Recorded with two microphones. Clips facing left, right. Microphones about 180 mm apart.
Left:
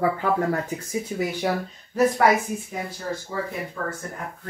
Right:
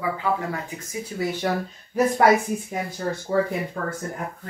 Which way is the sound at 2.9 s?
55° right (ahead or behind).